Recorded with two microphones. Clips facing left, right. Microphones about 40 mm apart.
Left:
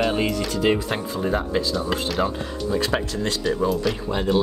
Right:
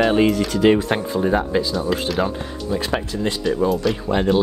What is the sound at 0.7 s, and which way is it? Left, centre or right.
Speech, right.